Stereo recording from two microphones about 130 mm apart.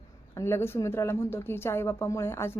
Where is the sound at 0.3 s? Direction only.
20° left (ahead or behind).